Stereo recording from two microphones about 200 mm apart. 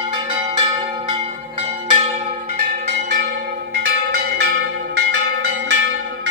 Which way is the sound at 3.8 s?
50° right (ahead or behind).